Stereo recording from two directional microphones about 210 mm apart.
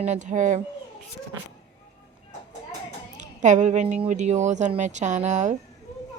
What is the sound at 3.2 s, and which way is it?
Speech, 35° right (ahead or behind).